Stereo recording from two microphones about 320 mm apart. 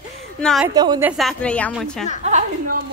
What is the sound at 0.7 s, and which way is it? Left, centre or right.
Speech, centre.